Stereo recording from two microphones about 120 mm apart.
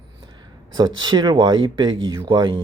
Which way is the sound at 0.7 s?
35° right (ahead or behind).